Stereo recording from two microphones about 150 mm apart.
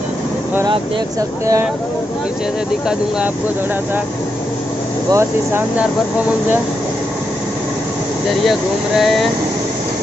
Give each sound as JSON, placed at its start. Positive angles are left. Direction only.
{"t": 5.1, "sound": "speech", "side_deg": -15}
{"t": 8.5, "sound": "speech", "side_deg": 0}